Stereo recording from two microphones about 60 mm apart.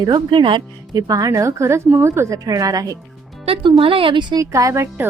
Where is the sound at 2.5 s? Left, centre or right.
Right.